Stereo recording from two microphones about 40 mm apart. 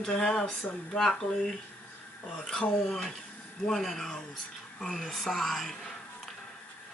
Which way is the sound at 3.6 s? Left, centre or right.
Centre.